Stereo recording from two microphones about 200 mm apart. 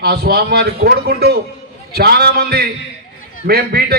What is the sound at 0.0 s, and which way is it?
A man's voice, 50° right (ahead or behind).